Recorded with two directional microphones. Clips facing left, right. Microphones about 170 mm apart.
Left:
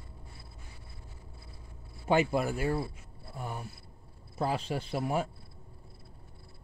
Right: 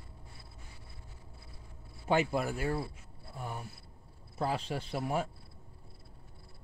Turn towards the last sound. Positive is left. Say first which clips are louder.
# left 2 dB
turn(degrees=15)  # may be behind; listen again after turning